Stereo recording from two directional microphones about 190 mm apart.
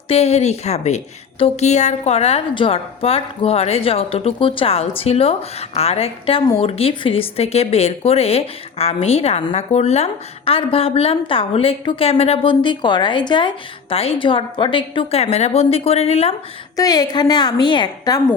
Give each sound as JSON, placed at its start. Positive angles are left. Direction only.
{"t": 0.1, "sound": "speech", "side_deg": 35}
{"t": 16.7, "sound": "a woman's voice", "side_deg": 20}